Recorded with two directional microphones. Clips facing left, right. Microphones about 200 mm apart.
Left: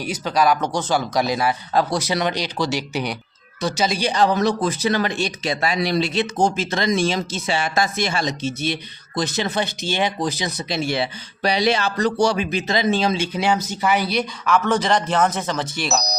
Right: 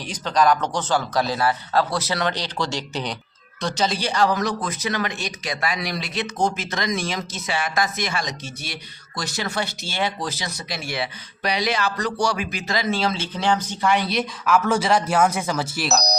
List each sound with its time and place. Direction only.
0.0 s speech: 10° left (ahead or behind)